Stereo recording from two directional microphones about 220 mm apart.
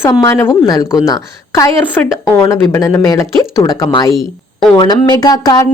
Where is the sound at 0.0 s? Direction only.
15° left (ahead or behind).